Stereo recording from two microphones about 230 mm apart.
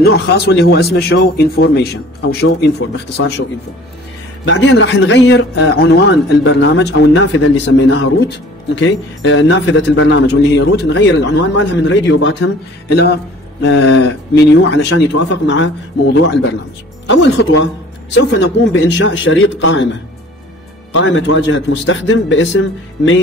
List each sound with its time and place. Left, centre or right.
0.0 s a man's voice: left
3.2 s a man's voice: left
4.5 s a man's voice: left